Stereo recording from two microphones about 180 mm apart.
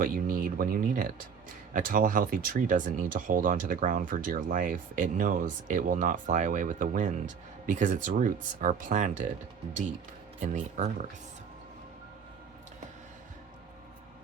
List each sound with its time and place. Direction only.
0.0 s speech: 50° right (ahead or behind)
10.4 s speech: 45° right (ahead or behind)